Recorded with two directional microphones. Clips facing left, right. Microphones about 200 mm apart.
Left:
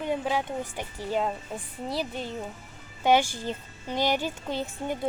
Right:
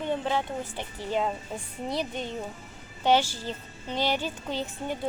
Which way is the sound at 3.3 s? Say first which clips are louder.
Left 2 dB; 15° left (ahead or behind).